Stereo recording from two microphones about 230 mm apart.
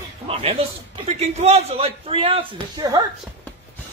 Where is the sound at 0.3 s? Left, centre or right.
Right.